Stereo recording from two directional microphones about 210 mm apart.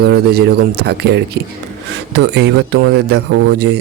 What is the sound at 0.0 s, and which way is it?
Speech, 50° right (ahead or behind).